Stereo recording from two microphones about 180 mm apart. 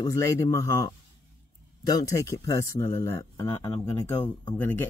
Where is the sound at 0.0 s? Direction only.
20° left (ahead or behind).